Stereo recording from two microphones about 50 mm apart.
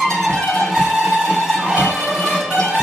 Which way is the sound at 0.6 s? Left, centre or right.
Centre.